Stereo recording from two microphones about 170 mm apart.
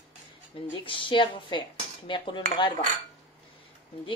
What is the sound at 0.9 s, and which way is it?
A woman's voice, 30° left (ahead or behind).